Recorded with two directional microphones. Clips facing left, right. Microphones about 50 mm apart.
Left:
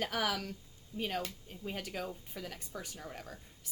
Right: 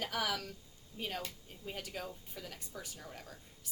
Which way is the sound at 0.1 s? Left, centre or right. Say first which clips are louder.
Left 2 dB; left.